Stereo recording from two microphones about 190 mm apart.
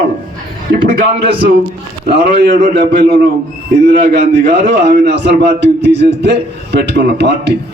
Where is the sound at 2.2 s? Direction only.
60° right (ahead or behind).